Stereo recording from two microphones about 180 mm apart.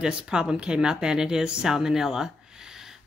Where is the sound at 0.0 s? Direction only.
5° right (ahead or behind).